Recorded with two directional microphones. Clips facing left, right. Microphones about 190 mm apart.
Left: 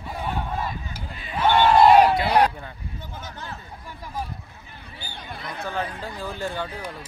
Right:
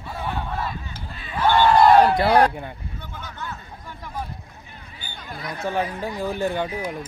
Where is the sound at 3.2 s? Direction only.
40° left (ahead or behind).